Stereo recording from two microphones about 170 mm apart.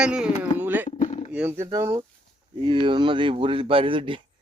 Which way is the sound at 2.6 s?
30° right (ahead or behind).